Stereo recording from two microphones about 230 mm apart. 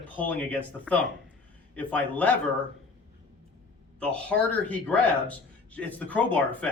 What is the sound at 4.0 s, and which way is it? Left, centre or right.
A man's voice, centre.